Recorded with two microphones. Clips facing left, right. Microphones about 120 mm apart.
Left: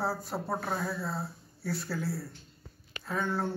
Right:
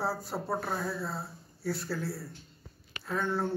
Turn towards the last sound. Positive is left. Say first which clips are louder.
# right 1 dB
turn(degrees=0)  # may be behind; listen again after turning